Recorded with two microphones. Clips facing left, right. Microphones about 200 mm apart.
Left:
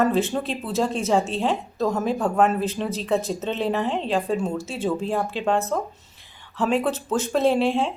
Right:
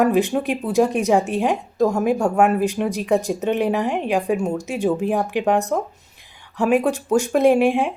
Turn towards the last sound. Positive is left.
turn(degrees=-15)  # may be behind; listen again after turning